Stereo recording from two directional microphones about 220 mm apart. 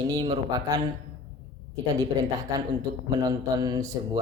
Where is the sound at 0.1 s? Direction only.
20° right (ahead or behind).